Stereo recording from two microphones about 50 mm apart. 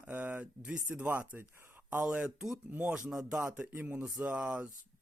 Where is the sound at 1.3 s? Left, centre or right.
Right.